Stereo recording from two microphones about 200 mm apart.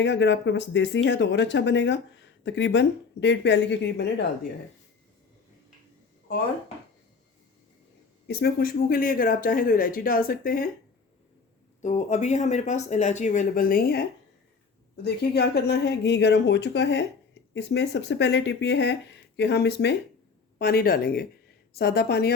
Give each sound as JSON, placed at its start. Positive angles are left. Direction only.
{"t": 0.0, "sound": "speech", "side_deg": 60}
{"t": 8.3, "sound": "speech", "side_deg": 50}
{"t": 11.8, "sound": "speech", "side_deg": 35}
{"t": 15.0, "sound": "speech", "side_deg": 55}